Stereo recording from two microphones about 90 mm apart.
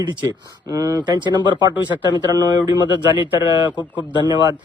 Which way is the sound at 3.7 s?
15° right (ahead or behind).